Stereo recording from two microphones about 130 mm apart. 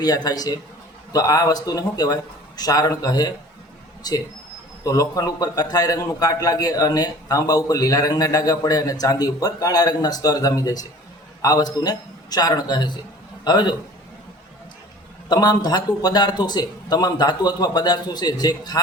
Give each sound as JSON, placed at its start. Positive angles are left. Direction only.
{"t": 0.0, "sound": "a man's voice", "side_deg": 30}
{"t": 4.8, "sound": "a man's voice", "side_deg": 30}
{"t": 15.3, "sound": "speech", "side_deg": 30}